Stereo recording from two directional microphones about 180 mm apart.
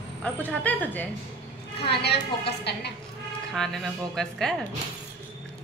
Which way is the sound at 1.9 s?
65° left (ahead or behind).